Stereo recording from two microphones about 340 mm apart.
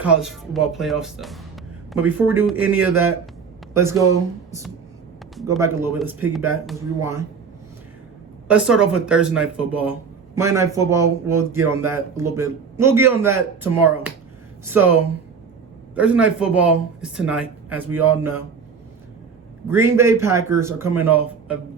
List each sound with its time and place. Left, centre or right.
0.0 s a man's voice: centre
8.4 s a man's voice: centre
16.0 s a man's voice: centre
19.6 s a man's voice: centre